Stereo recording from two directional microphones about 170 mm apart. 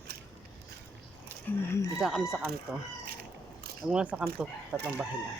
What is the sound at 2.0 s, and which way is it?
Speech, centre (ahead or behind).